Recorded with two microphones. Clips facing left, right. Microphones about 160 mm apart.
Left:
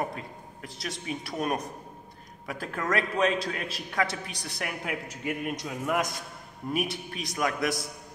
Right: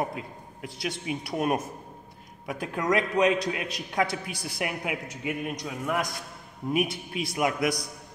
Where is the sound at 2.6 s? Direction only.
15° right (ahead or behind).